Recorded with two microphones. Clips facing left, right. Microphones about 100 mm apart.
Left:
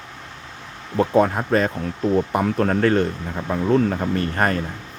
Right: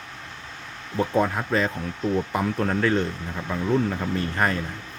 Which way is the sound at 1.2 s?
45° left (ahead or behind).